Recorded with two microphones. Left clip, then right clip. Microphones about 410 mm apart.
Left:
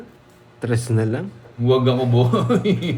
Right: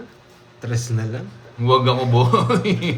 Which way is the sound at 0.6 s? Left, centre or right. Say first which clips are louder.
Left 6 dB; centre.